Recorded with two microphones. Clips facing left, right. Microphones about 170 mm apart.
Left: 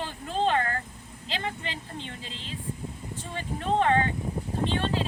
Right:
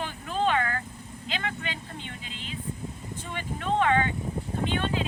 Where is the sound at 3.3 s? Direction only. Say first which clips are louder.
Left 1 dB; 35° left (ahead or behind).